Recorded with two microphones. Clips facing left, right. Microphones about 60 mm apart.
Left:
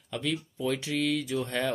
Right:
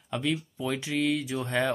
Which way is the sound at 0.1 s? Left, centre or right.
Centre.